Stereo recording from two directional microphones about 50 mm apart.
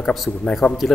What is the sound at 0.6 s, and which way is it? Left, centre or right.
Speech, left.